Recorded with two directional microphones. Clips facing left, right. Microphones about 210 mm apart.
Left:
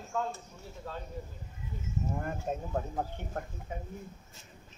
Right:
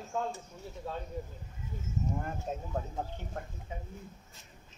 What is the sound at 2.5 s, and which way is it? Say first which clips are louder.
Speech: left 4 dB; 55° left (ahead or behind).